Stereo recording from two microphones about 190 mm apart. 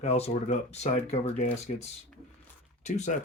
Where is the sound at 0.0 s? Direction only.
35° left (ahead or behind).